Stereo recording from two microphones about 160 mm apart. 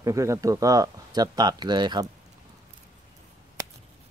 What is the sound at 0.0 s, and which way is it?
Speech, 20° right (ahead or behind).